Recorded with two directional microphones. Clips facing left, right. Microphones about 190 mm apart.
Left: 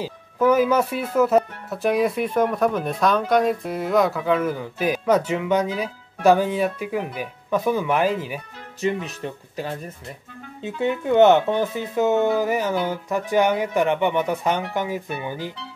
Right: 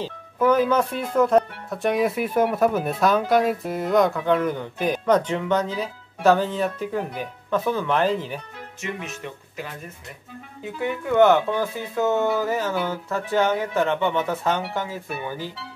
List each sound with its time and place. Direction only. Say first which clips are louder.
0.0 s speech: left 1 dB; 10° left (ahead or behind)
8.8 s speech: left 7 dB; 35° left (ahead or behind); by 15.5 s 15° left (ahead or behind)